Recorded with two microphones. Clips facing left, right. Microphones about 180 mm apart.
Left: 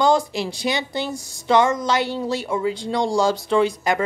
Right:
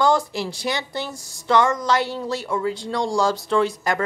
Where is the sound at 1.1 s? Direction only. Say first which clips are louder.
Left 8 dB; centre (ahead or behind).